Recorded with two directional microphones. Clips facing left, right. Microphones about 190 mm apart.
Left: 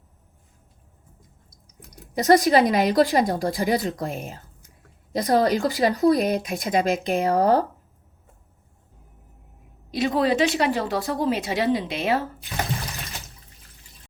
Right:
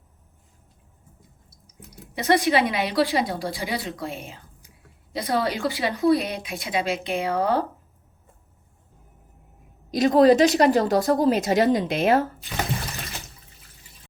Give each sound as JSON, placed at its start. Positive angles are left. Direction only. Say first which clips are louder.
{"t": 1.5, "sound": "water", "louder": "right 3 dB", "side_deg": -5}
{"t": 2.1, "sound": "a woman's voice", "louder": "left 4 dB", "side_deg": 40}
{"t": 5.1, "sound": "a woman's voice", "louder": "left 5 dB", "side_deg": 45}
{"t": 9.9, "sound": "speech", "louder": "right 6 dB", "side_deg": -40}